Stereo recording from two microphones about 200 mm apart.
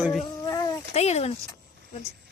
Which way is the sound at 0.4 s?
15° left (ahead or behind).